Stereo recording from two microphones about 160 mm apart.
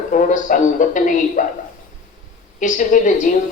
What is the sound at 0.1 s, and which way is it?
Speech, 50° left (ahead or behind).